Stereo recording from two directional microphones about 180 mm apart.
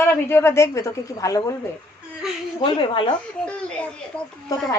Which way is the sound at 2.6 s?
30° left (ahead or behind).